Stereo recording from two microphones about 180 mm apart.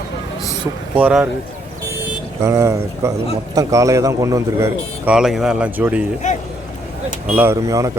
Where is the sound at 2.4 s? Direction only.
15° right (ahead or behind).